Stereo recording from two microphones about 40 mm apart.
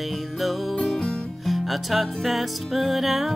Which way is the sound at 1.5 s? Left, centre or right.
Centre.